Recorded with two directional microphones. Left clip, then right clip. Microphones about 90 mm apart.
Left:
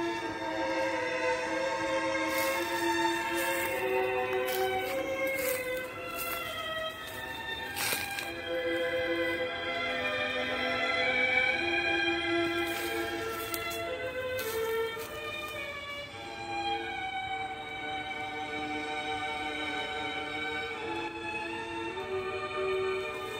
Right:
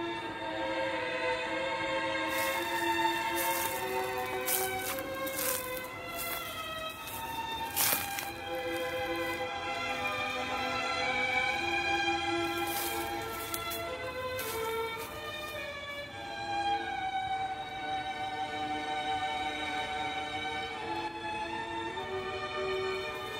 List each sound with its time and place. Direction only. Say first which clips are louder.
0.6 s music: left 2 dB; 45° left (ahead or behind)
3.3 s music: left 1 dB; 20° left (ahead or behind)
8.6 s music: left 4 dB; 15° left (ahead or behind)
14.6 s music: left 3 dB; 5° left (ahead or behind)
16.5 s music: right 1 dB; 15° left (ahead or behind)
22.1 s music: left 2 dB; 15° left (ahead or behind)